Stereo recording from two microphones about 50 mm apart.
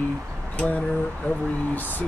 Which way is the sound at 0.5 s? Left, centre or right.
Left.